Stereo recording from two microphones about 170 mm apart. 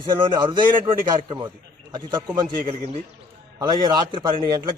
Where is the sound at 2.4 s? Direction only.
30° right (ahead or behind).